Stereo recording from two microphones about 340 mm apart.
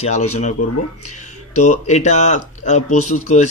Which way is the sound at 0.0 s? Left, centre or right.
Centre.